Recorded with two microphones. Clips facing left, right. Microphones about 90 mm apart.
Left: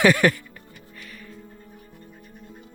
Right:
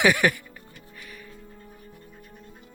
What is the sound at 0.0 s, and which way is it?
Music, 10° right (ahead or behind).